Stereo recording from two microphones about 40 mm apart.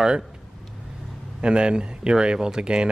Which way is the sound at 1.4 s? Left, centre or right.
Right.